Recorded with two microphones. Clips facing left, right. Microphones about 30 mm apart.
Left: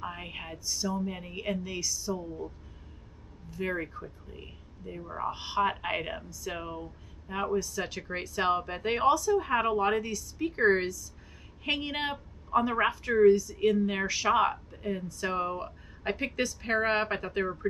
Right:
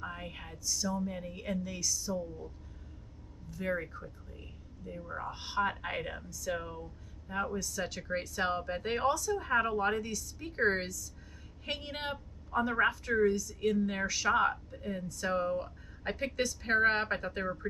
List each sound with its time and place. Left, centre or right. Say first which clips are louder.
0.0 s a woman's voice: left 4 dB; left
3.5 s a woman's voice: left 2 dB; left
7.7 s a woman's voice: left 1 dB; left
10.5 s a woman's voice: left 5 dB; left
15.4 s speech: even; left
16.3 s a woman's voice: right 2 dB; left